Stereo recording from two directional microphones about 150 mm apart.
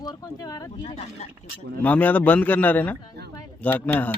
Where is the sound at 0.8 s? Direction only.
40° left (ahead or behind).